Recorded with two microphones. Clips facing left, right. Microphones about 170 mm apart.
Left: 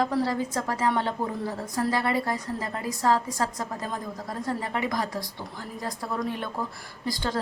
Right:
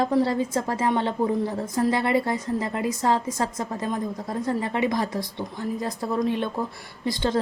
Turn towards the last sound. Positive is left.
turn(degrees=-25)  # may be behind; listen again after turning